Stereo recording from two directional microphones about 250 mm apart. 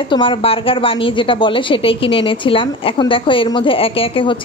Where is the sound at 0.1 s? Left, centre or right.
Centre.